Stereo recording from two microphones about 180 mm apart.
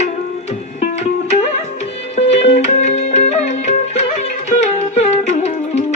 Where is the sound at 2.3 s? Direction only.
35° left (ahead or behind).